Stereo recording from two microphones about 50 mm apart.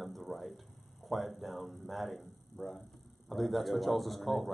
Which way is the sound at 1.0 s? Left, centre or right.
Centre.